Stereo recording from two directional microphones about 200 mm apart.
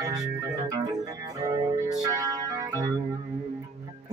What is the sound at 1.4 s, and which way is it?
Music, 20° right (ahead or behind).